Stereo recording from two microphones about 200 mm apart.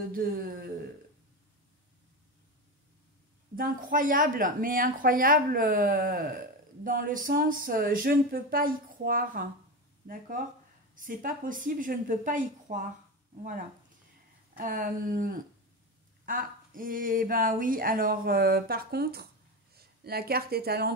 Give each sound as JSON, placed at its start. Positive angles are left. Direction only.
{"t": 0.1, "sound": "speech", "side_deg": -45}
{"t": 3.5, "sound": "speech", "side_deg": -45}
{"t": 11.0, "sound": "a woman's voice", "side_deg": -40}
{"t": 14.6, "sound": "speech", "side_deg": -45}